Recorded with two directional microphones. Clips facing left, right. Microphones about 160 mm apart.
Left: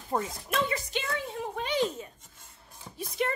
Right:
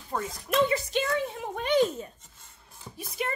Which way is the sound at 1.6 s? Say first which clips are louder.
Right 6 dB; 50° right (ahead or behind).